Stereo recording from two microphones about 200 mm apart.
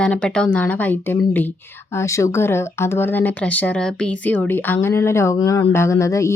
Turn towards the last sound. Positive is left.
turn(degrees=15)  # may be behind; listen again after turning